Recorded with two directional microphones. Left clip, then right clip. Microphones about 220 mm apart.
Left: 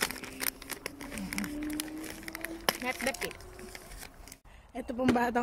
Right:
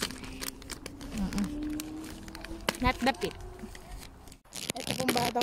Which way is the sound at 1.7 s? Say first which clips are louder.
Even; 25° left (ahead or behind).